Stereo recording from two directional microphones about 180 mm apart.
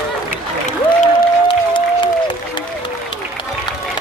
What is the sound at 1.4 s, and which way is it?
Music, 25° left (ahead or behind).